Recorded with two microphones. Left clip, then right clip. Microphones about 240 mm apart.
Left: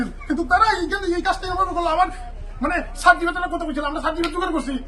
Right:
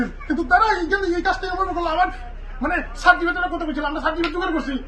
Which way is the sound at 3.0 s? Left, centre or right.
Left.